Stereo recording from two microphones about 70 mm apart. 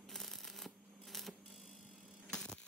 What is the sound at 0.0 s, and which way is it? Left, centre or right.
Shuffling cards, centre.